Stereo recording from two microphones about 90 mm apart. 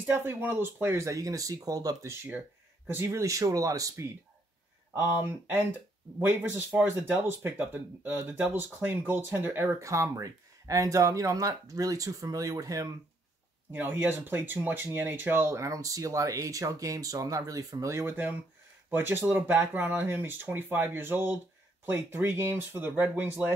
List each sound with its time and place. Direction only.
0.0 s speech: 20° right (ahead or behind); by 2.1 s 40° right (ahead or behind)
2.9 s speech: 25° right (ahead or behind)
4.9 s speech: 25° right (ahead or behind)
13.7 s speech: 25° right (ahead or behind)